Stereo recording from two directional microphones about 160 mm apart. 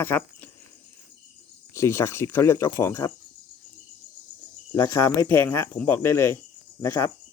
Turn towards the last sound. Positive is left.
turn(degrees=15)  # may be behind; listen again after turning